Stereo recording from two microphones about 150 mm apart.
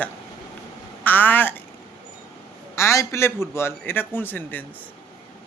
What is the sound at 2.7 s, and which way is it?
A man's voice, 20° left (ahead or behind).